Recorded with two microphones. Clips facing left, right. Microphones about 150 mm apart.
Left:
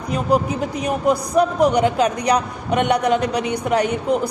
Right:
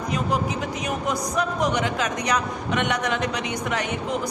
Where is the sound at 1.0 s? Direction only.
35° left (ahead or behind).